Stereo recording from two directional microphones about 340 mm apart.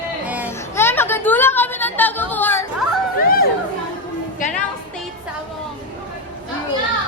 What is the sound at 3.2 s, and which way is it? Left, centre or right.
Chatter, left.